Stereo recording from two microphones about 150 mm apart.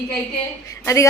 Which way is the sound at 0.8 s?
20° left (ahead or behind).